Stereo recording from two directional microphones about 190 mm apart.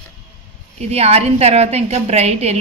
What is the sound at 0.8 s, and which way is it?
A woman's voice, 35° right (ahead or behind).